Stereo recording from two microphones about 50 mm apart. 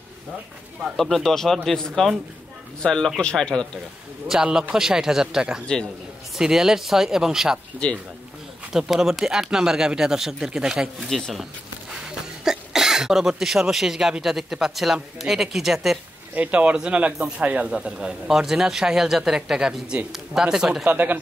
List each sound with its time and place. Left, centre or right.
0.9 s speech: centre
4.3 s speech: centre
8.7 s speech: centre
11.1 s speech: centre
12.1 s a sound: centre
13.4 s speech: centre
16.3 s speech: right
17.6 s speech: centre
18.3 s speech: centre
20.8 s speech: right